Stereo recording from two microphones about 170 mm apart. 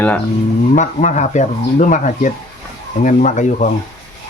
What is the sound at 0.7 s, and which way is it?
Speech, 45° left (ahead or behind).